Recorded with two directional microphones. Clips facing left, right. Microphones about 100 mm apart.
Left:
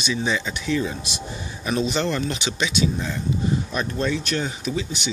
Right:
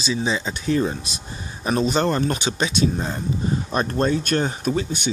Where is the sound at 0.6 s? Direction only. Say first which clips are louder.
Right 5 dB; 40° right (ahead or behind).